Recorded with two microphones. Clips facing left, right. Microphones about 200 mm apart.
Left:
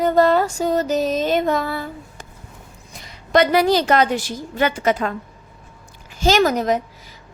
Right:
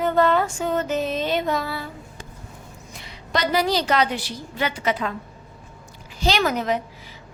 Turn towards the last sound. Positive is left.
turn(degrees=40)  # may be behind; listen again after turning